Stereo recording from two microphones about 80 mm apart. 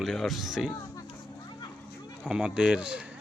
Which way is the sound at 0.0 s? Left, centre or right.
Centre.